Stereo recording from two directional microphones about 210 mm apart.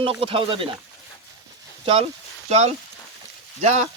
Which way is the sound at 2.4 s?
30° right (ahead or behind).